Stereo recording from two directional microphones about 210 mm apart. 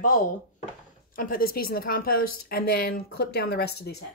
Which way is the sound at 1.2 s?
45° left (ahead or behind).